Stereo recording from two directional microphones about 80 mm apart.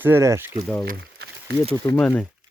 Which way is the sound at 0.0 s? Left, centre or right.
Right.